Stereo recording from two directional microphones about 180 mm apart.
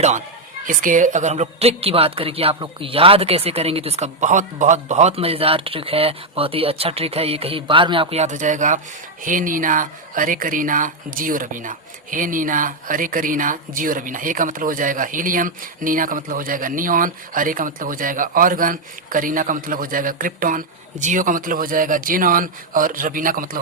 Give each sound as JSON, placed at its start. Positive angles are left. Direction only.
{"t": 0.7, "sound": "speech", "side_deg": -50}